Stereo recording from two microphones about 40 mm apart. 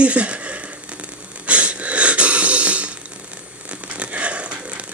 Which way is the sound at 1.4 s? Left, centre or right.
Right.